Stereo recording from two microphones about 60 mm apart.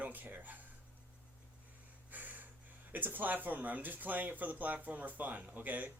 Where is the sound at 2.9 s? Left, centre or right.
Right.